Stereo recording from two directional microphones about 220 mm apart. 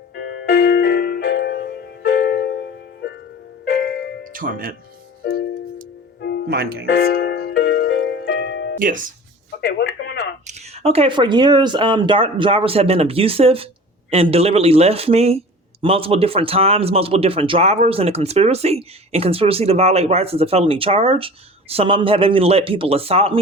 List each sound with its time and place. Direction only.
0.2 s music: 50° left (ahead or behind)
4.2 s music: 40° right (ahead or behind)
6.5 s speech: 45° right (ahead or behind)
6.8 s music: 50° left (ahead or behind)
8.8 s speech: 35° right (ahead or behind)
9.6 s telephone: 50° left (ahead or behind)
10.4 s speech: 25° right (ahead or behind)